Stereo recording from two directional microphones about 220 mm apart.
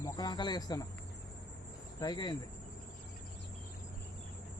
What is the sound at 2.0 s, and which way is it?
Speech, 20° left (ahead or behind).